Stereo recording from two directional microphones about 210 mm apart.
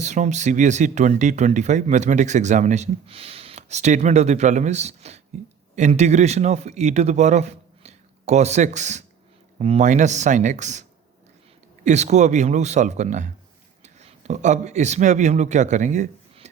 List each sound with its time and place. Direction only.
0.0 s speech: 35° right (ahead or behind)
11.9 s speech: 35° right (ahead or behind)